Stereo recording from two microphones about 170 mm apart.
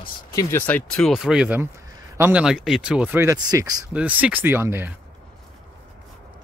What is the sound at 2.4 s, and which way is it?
Speech, 5° right (ahead or behind).